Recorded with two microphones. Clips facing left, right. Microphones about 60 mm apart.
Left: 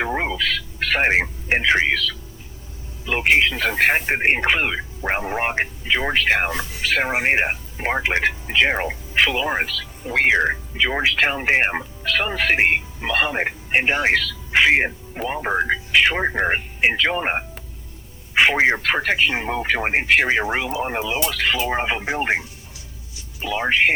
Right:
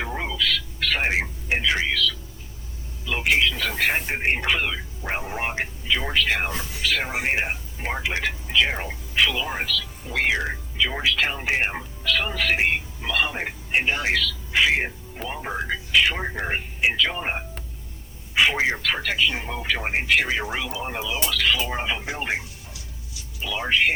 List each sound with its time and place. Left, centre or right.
0.0 s speech: left